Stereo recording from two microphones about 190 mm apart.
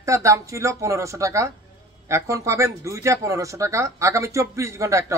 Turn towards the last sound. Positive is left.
turn(degrees=-15)  # may be behind; listen again after turning